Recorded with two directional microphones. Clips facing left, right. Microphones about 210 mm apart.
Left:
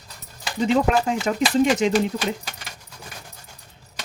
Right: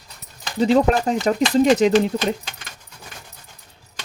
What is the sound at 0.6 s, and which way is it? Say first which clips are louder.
Speech: right 3 dB; 35° right (ahead or behind).